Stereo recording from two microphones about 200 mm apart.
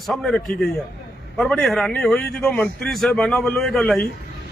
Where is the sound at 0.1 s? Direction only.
Centre (ahead or behind).